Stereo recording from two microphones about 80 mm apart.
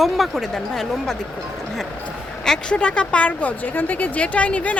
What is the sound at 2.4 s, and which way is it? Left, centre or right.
A woman's voice, centre.